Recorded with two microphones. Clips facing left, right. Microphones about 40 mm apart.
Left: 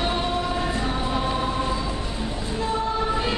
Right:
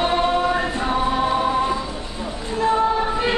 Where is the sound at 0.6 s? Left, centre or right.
Right.